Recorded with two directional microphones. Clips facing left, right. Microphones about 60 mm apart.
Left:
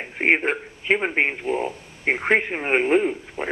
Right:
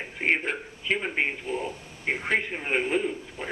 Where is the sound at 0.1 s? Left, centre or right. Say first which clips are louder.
Left 6 dB; left.